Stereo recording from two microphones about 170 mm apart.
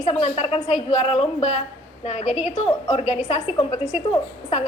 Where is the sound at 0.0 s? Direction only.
40° left (ahead or behind).